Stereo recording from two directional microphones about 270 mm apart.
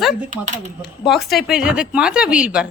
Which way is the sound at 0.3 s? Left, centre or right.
Right.